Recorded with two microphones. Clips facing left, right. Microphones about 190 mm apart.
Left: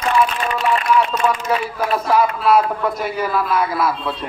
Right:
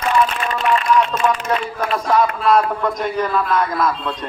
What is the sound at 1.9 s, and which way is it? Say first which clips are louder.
A man's voice: even; 5° left (ahead or behind).